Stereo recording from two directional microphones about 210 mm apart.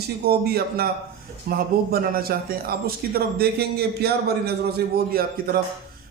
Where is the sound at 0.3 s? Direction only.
45° right (ahead or behind).